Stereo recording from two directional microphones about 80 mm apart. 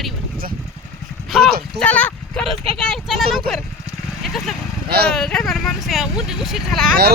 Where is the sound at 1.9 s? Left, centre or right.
Centre.